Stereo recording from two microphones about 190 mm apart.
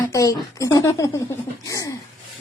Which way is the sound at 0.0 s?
15° left (ahead or behind).